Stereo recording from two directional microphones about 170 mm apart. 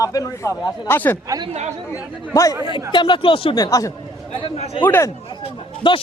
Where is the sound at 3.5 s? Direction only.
20° left (ahead or behind).